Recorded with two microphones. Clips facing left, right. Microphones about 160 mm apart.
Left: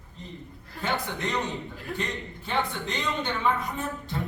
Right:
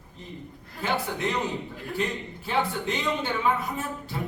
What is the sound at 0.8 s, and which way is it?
A man's voice, 5° right (ahead or behind).